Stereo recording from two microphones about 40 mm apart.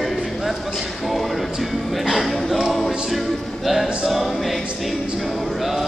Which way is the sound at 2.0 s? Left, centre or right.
Centre.